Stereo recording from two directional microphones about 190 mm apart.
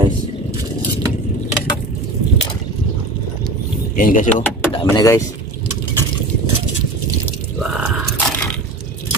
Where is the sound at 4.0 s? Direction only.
45° left (ahead or behind).